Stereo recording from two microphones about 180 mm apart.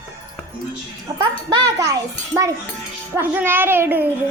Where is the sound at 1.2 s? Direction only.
25° right (ahead or behind).